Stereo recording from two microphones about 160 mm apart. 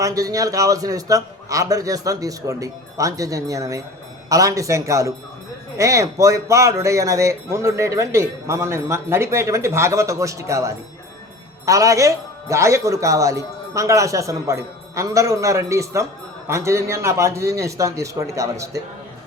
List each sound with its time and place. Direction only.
0.0 s speech: 20° right (ahead or behind)